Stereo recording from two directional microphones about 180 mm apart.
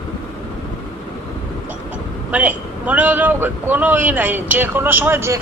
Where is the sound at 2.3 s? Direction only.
10° right (ahead or behind).